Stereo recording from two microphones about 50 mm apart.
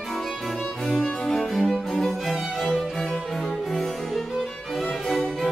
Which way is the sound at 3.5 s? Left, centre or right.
Centre.